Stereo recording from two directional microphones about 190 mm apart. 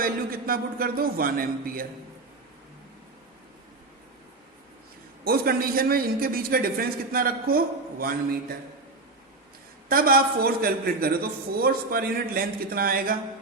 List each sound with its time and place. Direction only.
0.0 s a man's voice: 50° right (ahead or behind)
5.2 s a man's voice: 50° right (ahead or behind)
9.9 s a man's voice: 50° right (ahead or behind)